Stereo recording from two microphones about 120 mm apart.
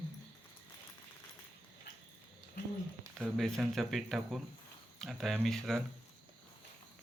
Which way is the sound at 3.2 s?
5° left (ahead or behind).